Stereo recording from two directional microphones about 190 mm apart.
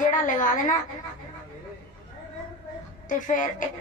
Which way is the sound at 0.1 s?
45° left (ahead or behind).